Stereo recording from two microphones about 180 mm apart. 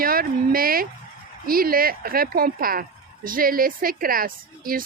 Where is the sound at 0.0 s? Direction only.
55° right (ahead or behind).